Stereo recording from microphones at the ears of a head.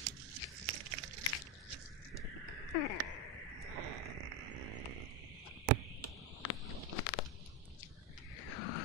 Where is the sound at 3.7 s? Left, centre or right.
Right.